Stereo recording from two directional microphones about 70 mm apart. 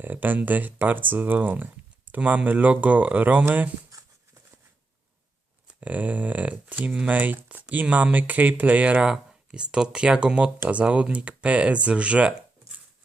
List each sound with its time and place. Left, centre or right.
0.0 s speech: right
3.9 s patter: right
5.6 s speech: right